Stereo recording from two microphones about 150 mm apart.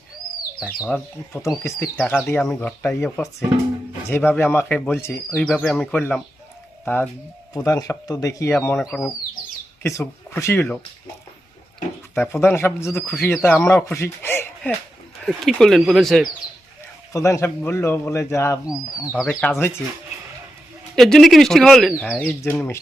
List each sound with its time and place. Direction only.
1.3 s speech: 20° left (ahead or behind); by 2.6 s 5° left (ahead or behind)
2.6 s speech: 15° left (ahead or behind)
4.1 s speech: 15° left (ahead or behind)
5.4 s speech: centre (ahead or behind)
8.9 s speech: centre (ahead or behind)
9.8 s speech: 20° left (ahead or behind)
12.1 s speech: 15° left (ahead or behind)
15.2 s speech: centre (ahead or behind)
17.1 s speech: 20° left (ahead or behind)
19.1 s speech: centre (ahead or behind)
19.5 s speech: 15° left (ahead or behind)
20.9 s speech: centre (ahead or behind)